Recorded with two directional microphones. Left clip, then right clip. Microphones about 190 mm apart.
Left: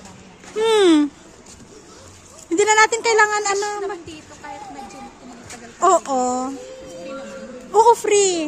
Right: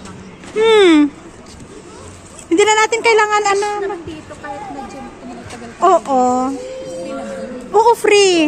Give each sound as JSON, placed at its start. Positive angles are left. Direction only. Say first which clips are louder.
{"t": 0.6, "sound": "a sound", "louder": "right 5 dB", "side_deg": 15}
{"t": 2.5, "sound": "speech", "louder": "right 3 dB", "side_deg": 10}
{"t": 5.5, "sound": "a child's voice", "louder": "right 4 dB", "side_deg": 25}
{"t": 7.9, "sound": "a woman's voice", "louder": "right 5 dB", "side_deg": 0}